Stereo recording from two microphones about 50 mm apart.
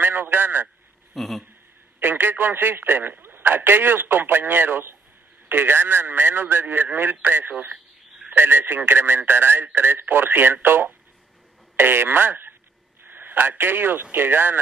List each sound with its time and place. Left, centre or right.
0.0 s a man's voice: right
1.1 s speech: centre
2.0 s a man's voice: right
8.3 s a man's voice: right